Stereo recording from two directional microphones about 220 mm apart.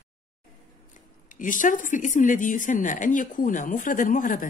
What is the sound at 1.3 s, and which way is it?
Speech, 35° left (ahead or behind).